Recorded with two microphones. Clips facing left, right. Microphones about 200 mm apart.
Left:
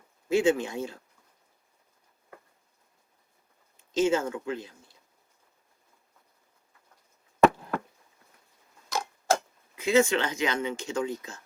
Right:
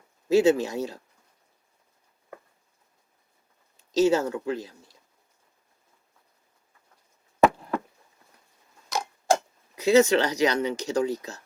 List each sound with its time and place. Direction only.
0.3 s speech: 40° right (ahead or behind)
3.8 s speech: 40° right (ahead or behind)
8.9 s clock: 15° right (ahead or behind)
9.7 s speech: 40° right (ahead or behind)